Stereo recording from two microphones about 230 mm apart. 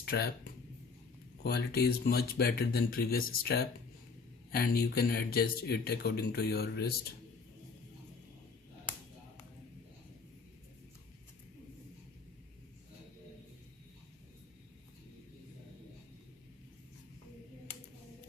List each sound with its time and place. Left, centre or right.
0.0 s speech: left
1.5 s speech: left